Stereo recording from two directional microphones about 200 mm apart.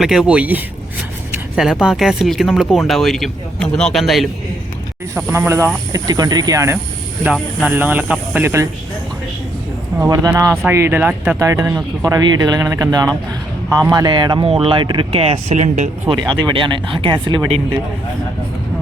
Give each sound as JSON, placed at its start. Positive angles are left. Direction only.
{"t": 0.0, "sound": "speech", "side_deg": -5}
{"t": 7.3, "sound": "speech", "side_deg": -5}
{"t": 10.0, "sound": "speech", "side_deg": -15}
{"t": 16.1, "sound": "speech", "side_deg": -20}